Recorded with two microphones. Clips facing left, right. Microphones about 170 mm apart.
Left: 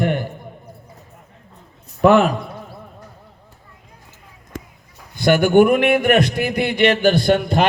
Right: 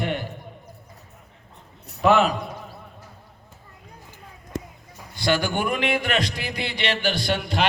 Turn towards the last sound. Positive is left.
turn(degrees=50)  # may be behind; listen again after turning